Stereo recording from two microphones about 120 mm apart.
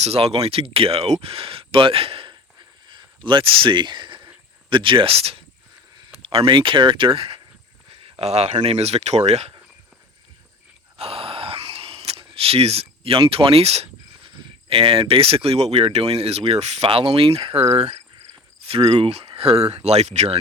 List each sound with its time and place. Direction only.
0.0 s speech: 55° right (ahead or behind)
2.8 s a sound: 40° right (ahead or behind)
4.7 s speech: 45° right (ahead or behind)
8.2 s speech: 60° right (ahead or behind)
10.9 s groan: 55° right (ahead or behind)
14.3 s speech: 45° right (ahead or behind)
18.6 s cricket: 55° right (ahead or behind)
18.9 s speech: 55° right (ahead or behind)